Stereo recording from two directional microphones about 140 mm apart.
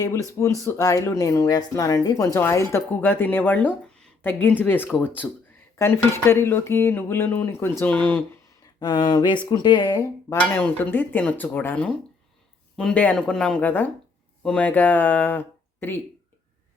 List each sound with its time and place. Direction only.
0.6 s speech: 25° left (ahead or behind)
8.8 s speech: 30° left (ahead or behind)
10.3 s speech: 10° left (ahead or behind)